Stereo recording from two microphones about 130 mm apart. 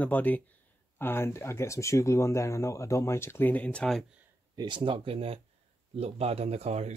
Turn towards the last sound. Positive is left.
turn(degrees=-55)  # may be behind; listen again after turning